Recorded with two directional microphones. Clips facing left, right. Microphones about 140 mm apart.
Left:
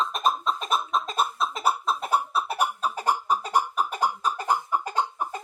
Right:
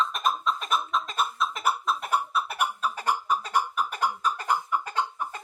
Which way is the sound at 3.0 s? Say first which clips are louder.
Left 2 dB; 30° left (ahead or behind).